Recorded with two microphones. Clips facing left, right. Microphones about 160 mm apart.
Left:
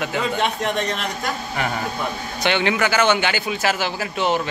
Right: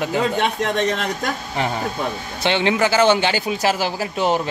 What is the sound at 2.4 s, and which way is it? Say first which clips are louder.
A man's voice: right 2 dB; 25° right (ahead or behind).